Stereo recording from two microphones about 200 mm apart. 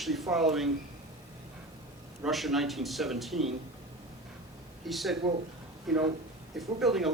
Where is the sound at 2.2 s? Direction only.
Centre (ahead or behind).